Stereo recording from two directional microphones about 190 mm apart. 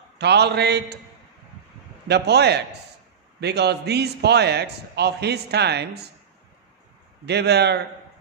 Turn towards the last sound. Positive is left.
turn(degrees=-60)  # may be behind; listen again after turning